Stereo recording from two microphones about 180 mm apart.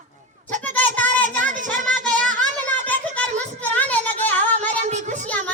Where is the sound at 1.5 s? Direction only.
45° right (ahead or behind).